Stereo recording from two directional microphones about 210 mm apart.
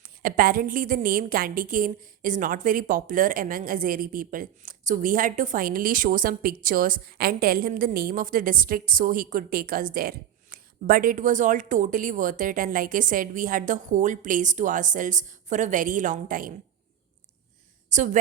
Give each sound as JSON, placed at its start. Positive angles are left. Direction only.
{"t": 0.0, "sound": "a woman's voice", "side_deg": -40}
{"t": 17.8, "sound": "speech", "side_deg": -35}